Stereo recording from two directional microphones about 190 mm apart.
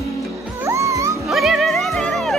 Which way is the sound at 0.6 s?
15° right (ahead or behind).